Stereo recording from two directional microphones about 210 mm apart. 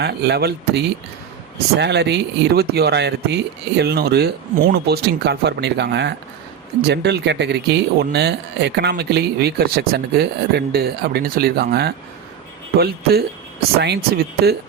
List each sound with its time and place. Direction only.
0.0 s speech: 50° right (ahead or behind)